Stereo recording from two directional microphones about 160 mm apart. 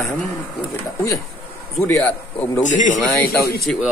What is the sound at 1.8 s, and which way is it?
Speech, 10° left (ahead or behind).